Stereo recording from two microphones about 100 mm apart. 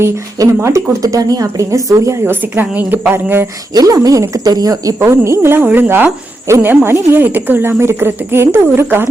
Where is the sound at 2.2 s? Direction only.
20° right (ahead or behind).